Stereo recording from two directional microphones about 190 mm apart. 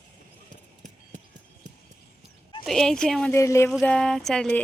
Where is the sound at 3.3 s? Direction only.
15° left (ahead or behind).